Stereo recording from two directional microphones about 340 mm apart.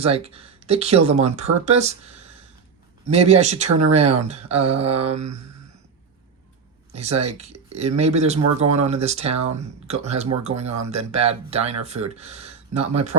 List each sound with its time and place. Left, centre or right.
0.0 s speech: centre
6.9 s speech: centre